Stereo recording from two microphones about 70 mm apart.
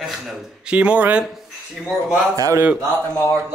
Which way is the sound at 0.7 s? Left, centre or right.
Centre.